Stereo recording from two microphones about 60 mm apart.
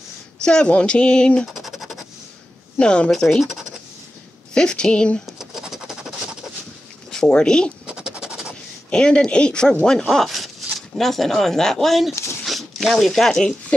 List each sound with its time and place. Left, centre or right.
0.4 s speech: centre
1.5 s scratch: centre
2.8 s speech: centre
3.3 s speech: centre
4.6 s speech: centre
5.2 s scratch: centre
7.1 s speech: centre
7.8 s scratch: centre
8.9 s speech: centre
10.0 s speech: centre